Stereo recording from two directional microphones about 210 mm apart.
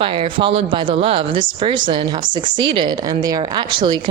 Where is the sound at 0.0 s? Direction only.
25° right (ahead or behind).